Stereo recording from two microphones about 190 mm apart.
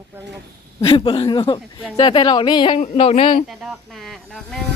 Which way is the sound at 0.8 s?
30° left (ahead or behind).